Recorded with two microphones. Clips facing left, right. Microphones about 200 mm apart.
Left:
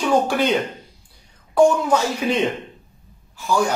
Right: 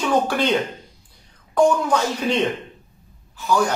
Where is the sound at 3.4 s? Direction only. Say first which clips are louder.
Even; 10° left (ahead or behind).